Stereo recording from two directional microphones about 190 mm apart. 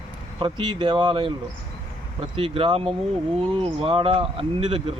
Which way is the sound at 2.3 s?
30° right (ahead or behind).